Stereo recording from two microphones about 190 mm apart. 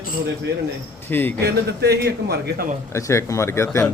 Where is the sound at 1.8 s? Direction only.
55° right (ahead or behind).